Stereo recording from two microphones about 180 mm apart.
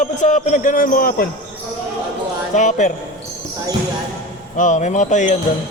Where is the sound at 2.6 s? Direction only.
45° left (ahead or behind).